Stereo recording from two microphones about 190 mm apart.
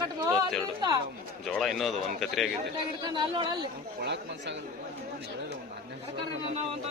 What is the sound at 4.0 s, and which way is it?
Speech, 65° right (ahead or behind).